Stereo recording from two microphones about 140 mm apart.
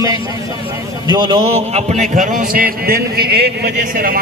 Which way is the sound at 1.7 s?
50° right (ahead or behind).